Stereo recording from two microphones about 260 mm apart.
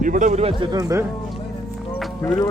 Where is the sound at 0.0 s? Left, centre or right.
Right; by 1.0 s centre.